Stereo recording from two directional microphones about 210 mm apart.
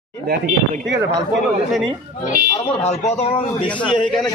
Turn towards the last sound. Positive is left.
turn(degrees=30)  # may be behind; listen again after turning